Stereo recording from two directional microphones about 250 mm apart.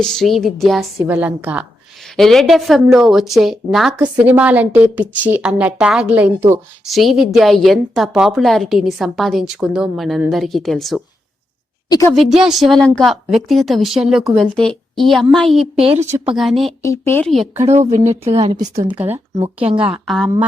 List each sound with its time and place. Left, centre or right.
0.0 s a woman's voice: centre
11.9 s a woman's voice: centre
12.1 s a woman's voice: centre
15.7 s speech: right
16.3 s a woman's voice: centre
16.8 s a woman's voice: centre
17.7 s speech: right
20.1 s a woman's voice: centre